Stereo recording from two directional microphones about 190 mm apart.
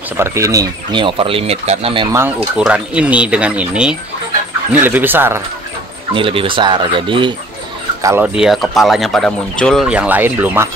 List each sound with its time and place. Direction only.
0.2 s speech: 15° right (ahead or behind)
2.1 s speech: 5° right (ahead or behind)
6.1 s speech: 25° right (ahead or behind)
8.0 s speech: 15° right (ahead or behind)
8.4 s speech: centre (ahead or behind)